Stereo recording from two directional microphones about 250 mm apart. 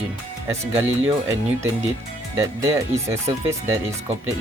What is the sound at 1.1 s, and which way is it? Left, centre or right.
Speech, centre.